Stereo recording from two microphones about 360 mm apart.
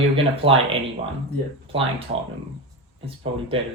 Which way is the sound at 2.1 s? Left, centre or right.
Right.